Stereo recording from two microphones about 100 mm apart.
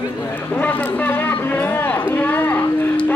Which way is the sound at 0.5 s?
20° left (ahead or behind).